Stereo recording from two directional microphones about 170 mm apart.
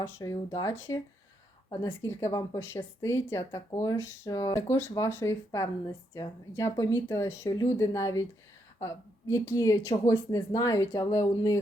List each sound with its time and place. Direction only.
0.0 s speech: 20° left (ahead or behind)
9.3 s speech: 20° left (ahead or behind)